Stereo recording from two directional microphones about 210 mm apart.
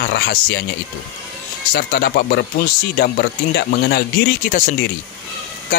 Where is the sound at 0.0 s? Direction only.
50° left (ahead or behind).